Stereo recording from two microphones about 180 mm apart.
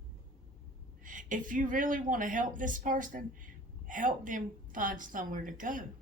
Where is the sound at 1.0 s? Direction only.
50° right (ahead or behind).